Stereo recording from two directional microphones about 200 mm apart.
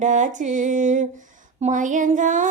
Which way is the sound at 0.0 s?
40° right (ahead or behind).